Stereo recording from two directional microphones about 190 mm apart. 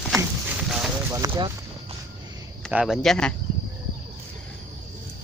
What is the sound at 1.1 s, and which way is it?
Speech, 20° right (ahead or behind).